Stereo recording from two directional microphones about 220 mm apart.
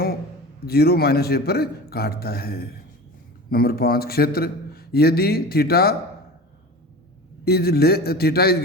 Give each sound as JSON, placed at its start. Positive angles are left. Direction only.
{"t": 0.6, "sound": "a man's voice", "side_deg": 45}
{"t": 7.4, "sound": "a man's voice", "side_deg": 45}